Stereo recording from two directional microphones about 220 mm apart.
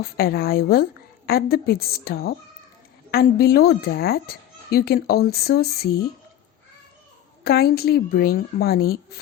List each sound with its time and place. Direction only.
0.0 s speech: 45° left (ahead or behind)
7.4 s speech: 45° left (ahead or behind)